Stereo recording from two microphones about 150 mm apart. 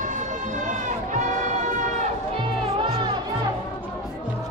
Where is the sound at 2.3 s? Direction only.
35° right (ahead or behind).